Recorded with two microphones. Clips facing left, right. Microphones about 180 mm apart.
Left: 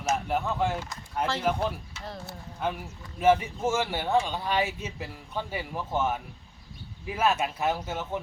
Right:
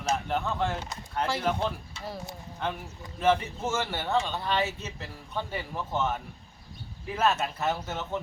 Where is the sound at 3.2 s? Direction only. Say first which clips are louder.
Left 3 dB; 10° left (ahead or behind).